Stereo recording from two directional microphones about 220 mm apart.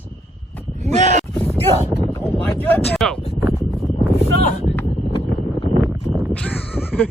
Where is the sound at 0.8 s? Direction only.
30° right (ahead or behind).